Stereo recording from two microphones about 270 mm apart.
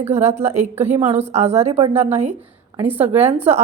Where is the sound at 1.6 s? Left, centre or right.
Right.